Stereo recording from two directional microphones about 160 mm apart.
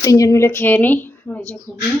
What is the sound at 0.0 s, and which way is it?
Speech, 20° left (ahead or behind).